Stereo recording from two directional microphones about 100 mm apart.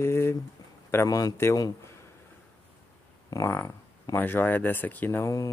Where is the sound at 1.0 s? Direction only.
35° left (ahead or behind).